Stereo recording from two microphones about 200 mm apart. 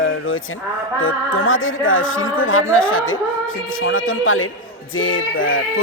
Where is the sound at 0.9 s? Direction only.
85° left.